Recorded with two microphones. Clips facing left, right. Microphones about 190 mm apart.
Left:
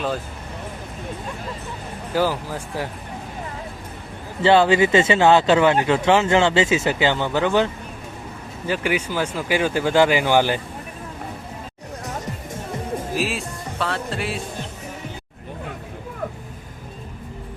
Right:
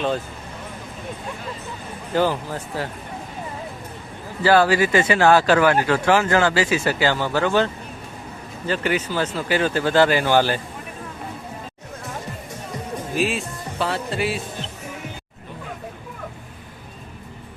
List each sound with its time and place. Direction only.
2.1 s speech: 10° left (ahead or behind)
4.4 s speech: 25° left (ahead or behind)
13.1 s speech: centre (ahead or behind)